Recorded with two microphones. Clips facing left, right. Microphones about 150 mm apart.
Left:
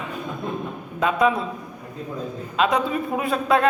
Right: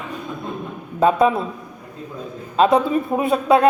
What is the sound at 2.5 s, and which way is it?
Speech, 35° right (ahead or behind).